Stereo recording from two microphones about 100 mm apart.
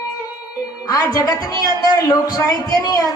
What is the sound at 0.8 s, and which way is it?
A man's voice, 35° left (ahead or behind).